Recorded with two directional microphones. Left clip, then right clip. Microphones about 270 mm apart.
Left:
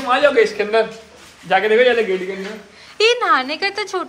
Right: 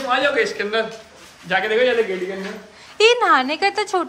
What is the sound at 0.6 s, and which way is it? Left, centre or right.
A man's voice, left.